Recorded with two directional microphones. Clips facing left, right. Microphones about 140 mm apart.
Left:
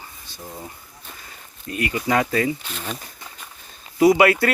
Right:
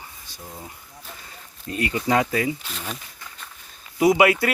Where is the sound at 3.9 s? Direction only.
15° right (ahead or behind).